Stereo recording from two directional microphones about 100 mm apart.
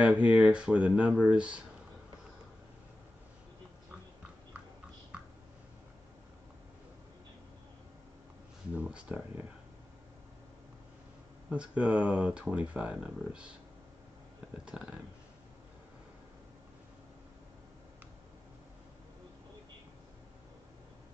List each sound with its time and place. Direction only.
0.0 s speech: 10° right (ahead or behind)
5.1 s a sound: 10° right (ahead or behind)
8.7 s speech: 10° right (ahead or behind)
11.5 s speech: 10° right (ahead or behind)
14.6 s speech: 10° right (ahead or behind)